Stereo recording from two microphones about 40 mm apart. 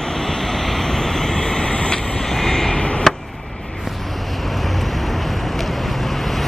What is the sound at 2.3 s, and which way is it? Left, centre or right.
Vehicle, centre.